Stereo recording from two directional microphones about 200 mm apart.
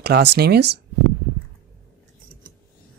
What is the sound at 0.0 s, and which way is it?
Speech, 55° right (ahead or behind).